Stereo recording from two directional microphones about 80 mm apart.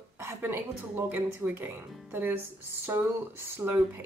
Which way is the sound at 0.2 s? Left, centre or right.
Right.